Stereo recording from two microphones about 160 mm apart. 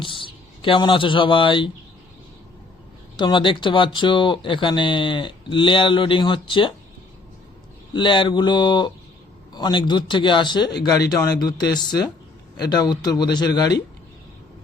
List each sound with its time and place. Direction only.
0.0 s speech: 30° left (ahead or behind)
3.2 s speech: 30° left (ahead or behind)
7.9 s a man's voice: 30° left (ahead or behind)